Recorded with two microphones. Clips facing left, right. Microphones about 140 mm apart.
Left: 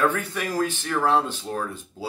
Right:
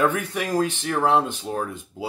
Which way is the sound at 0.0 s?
15° right (ahead or behind).